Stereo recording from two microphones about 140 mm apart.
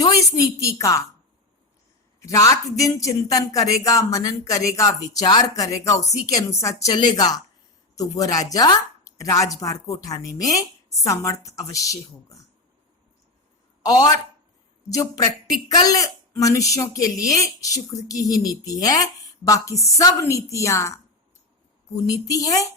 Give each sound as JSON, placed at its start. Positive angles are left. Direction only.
{"t": 0.6, "sound": "speech", "side_deg": 20}
{"t": 2.2, "sound": "speech", "side_deg": 25}
{"t": 13.8, "sound": "speech", "side_deg": 25}